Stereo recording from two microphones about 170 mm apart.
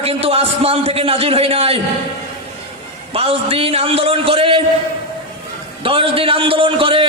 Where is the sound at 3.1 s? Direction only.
35° right (ahead or behind).